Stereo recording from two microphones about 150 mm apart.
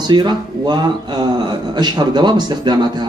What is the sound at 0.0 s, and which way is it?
A man's voice, 30° right (ahead or behind).